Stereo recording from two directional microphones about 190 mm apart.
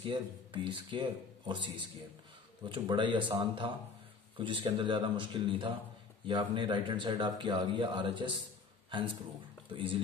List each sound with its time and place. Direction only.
0.0 s a man's voice: 25° right (ahead or behind)
9.7 s a man's voice: 25° right (ahead or behind)